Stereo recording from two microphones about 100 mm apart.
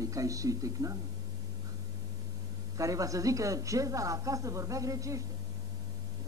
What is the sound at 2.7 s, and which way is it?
Speech, 35° right (ahead or behind).